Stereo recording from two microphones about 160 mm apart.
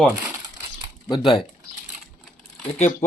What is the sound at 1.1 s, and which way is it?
Speech, 25° left (ahead or behind).